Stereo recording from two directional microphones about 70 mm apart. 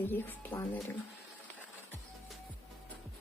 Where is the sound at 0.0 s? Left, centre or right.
Left.